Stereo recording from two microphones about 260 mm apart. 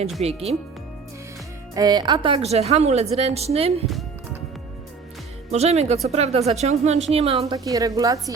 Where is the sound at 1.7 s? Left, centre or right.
Centre.